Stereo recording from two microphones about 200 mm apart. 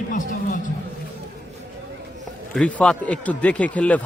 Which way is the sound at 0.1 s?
40° left (ahead or behind).